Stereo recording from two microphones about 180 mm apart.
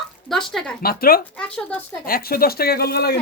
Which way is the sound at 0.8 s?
55° left (ahead or behind).